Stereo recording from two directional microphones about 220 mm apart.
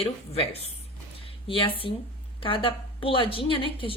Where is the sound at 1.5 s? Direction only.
25° left (ahead or behind).